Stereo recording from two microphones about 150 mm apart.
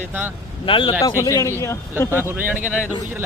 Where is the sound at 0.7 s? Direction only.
35° left (ahead or behind).